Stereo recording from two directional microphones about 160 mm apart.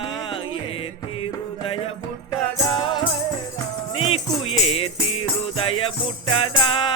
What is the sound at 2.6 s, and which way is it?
Music, 30° left (ahead or behind).